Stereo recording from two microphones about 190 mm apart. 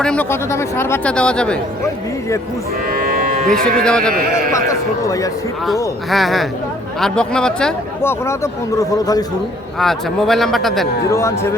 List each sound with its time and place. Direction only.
0.0 s speech: 5° left (ahead or behind)
2.9 s cattle: 50° right (ahead or behind)
3.6 s speech: 5° left (ahead or behind)
4.5 s speech: 15° left (ahead or behind)
6.1 s speech: centre (ahead or behind)
8.3 s speech: 15° left (ahead or behind)
9.8 s speech: centre (ahead or behind)
11.1 s speech: 15° left (ahead or behind)